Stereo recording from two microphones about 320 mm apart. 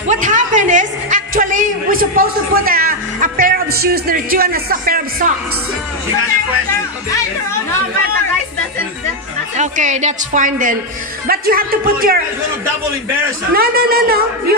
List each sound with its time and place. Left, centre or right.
0.1 s a man's voice: right
9.6 s a man's voice: right
13.6 s a man's voice: right